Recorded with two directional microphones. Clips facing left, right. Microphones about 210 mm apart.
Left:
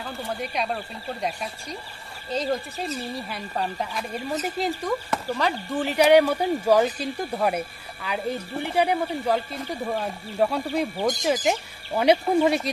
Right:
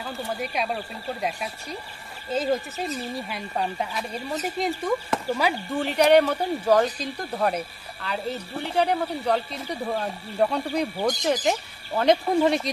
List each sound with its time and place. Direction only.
0.0 s speech: centre (ahead or behind)